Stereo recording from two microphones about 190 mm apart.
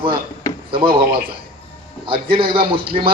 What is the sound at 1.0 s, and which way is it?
Speech, 55° right (ahead or behind).